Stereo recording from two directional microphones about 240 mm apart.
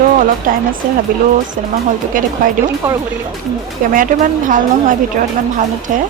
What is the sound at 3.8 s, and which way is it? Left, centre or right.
A woman's voice, right.